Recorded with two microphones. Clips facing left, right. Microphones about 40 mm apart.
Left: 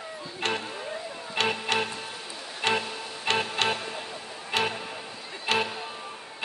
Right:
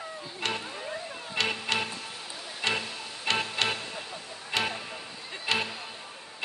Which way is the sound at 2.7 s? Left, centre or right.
Centre.